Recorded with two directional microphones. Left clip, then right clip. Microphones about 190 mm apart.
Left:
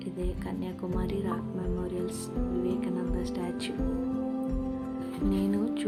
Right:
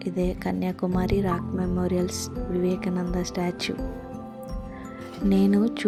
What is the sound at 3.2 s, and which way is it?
Speech, 35° right (ahead or behind).